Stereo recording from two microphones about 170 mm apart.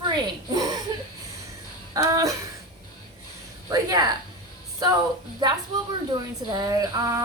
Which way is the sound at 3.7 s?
25° right (ahead or behind).